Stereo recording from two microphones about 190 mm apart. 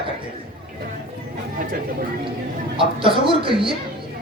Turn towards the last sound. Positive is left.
turn(degrees=-25)  # may be behind; listen again after turning